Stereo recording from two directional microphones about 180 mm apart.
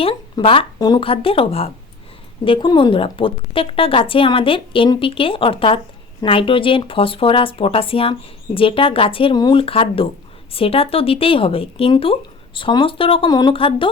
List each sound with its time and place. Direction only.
0.0 s a woman's voice: 30° left (ahead or behind)